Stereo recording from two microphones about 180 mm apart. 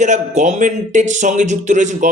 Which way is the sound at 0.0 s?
40° right (ahead or behind).